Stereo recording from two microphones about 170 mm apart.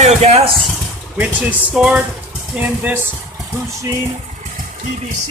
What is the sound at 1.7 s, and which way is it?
Speech, 5° right (ahead or behind).